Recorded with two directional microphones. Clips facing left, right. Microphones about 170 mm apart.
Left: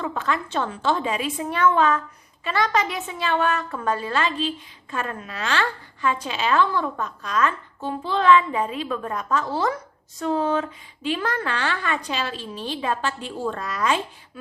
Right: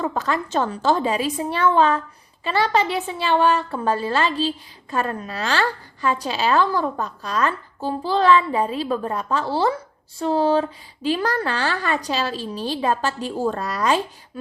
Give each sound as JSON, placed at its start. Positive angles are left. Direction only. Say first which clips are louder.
{"t": 0.0, "sound": "a woman's voice", "louder": "right 3 dB", "side_deg": -40}